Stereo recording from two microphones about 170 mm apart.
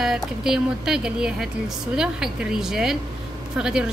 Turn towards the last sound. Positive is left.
turn(degrees=-5)  # may be behind; listen again after turning